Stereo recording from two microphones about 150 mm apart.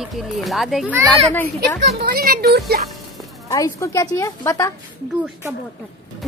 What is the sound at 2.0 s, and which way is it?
Speech, 75° right (ahead or behind).